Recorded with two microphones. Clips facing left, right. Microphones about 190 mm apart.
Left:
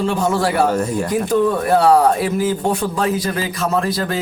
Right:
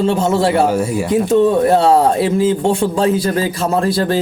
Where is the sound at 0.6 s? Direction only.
10° right (ahead or behind).